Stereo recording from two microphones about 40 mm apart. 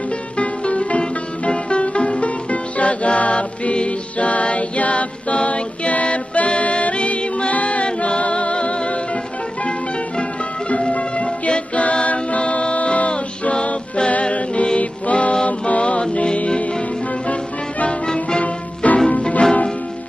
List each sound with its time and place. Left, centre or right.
0.4 s music: left
10.7 s music: left
18.0 s music: left
18.4 s music: left